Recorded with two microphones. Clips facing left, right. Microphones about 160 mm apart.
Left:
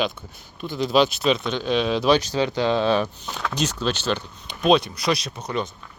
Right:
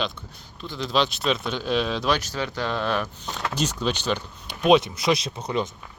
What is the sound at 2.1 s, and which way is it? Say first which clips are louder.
Speech: left 7 dB; 25° left (ahead or behind).